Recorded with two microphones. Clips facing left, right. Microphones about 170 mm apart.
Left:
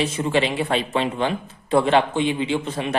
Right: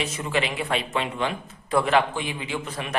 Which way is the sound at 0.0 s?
30° left (ahead or behind).